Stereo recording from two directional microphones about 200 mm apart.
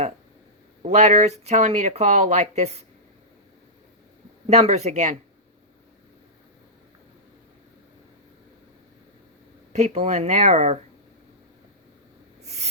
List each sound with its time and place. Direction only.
0.9 s speech: 35° right (ahead or behind)
4.4 s speech: 35° right (ahead or behind)
9.7 s speech: 35° right (ahead or behind)